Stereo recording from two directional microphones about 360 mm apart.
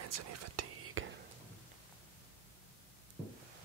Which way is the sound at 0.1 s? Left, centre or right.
Right.